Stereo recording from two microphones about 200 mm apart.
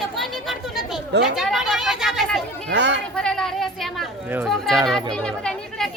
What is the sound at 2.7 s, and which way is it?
Speech, 60° right (ahead or behind).